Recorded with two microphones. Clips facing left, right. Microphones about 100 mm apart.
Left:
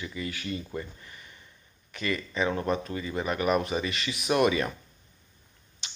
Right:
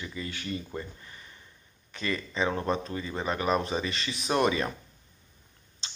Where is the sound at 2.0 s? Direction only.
10° left (ahead or behind).